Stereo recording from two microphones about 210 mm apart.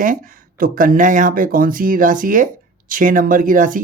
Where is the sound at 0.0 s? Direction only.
40° right (ahead or behind).